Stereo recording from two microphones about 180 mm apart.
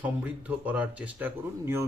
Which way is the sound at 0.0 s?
10° right (ahead or behind).